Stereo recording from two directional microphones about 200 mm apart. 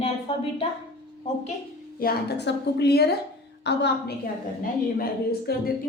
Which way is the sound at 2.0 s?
55° left (ahead or behind).